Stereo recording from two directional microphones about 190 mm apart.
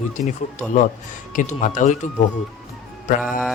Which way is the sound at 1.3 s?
40° left (ahead or behind).